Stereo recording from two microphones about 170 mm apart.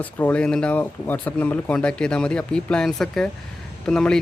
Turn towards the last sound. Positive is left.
turn(degrees=5)  # may be behind; listen again after turning